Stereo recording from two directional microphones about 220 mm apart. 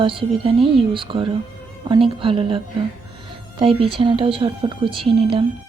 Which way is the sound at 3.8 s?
25° right (ahead or behind).